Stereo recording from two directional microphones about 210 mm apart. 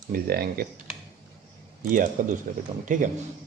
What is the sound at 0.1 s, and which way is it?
Speech, 45° right (ahead or behind).